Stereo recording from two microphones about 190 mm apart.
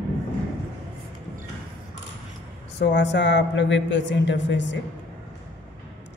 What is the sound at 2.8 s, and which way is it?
A man's voice, 65° left (ahead or behind).